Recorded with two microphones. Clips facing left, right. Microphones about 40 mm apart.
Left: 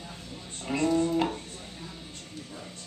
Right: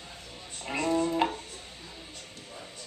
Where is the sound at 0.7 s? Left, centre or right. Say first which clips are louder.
Left 2 dB; centre.